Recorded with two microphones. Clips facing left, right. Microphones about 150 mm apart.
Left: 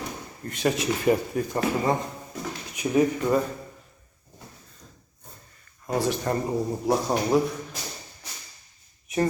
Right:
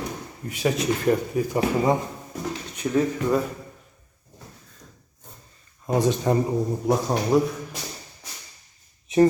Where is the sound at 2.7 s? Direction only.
10° left (ahead or behind).